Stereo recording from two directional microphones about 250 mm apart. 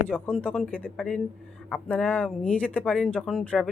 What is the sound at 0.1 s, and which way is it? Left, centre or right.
Speech, centre.